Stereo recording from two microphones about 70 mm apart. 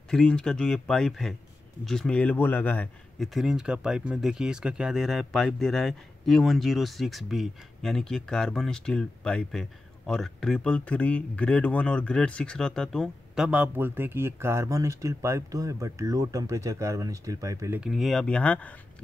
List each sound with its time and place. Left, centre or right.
0.1 s speech: centre; by 2.9 s left
3.2 s speech: centre
13.4 s a man's voice: centre
13.7 s speech: right
17.7 s speech: centre
18.2 s speech: centre